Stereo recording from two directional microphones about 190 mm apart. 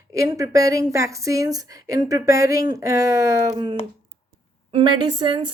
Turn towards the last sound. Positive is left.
turn(degrees=-25)  # may be behind; listen again after turning